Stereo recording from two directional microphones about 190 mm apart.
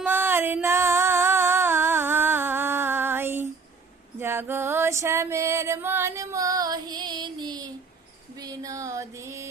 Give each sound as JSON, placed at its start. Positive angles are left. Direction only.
{"t": 0.0, "sound": "music", "side_deg": -10}
{"t": 4.2, "sound": "female singing", "side_deg": -10}
{"t": 8.4, "sound": "music", "side_deg": -20}